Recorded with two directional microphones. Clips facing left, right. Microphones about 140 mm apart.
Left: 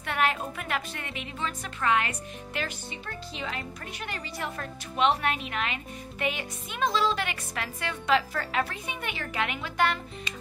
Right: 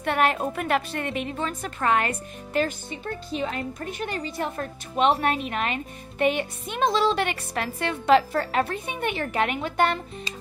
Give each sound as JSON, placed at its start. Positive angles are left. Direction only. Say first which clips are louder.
{"t": 0.0, "sound": "a woman's voice", "louder": "right 5 dB", "side_deg": -45}
{"t": 4.9, "sound": "a woman's voice", "louder": "right 4 dB", "side_deg": -45}
{"t": 6.8, "sound": "speech", "louder": "right 4 dB", "side_deg": -65}
{"t": 7.2, "sound": "a woman's voice", "louder": "right 6 dB", "side_deg": -45}
{"t": 9.2, "sound": "a woman's voice", "louder": "right 5 dB", "side_deg": -40}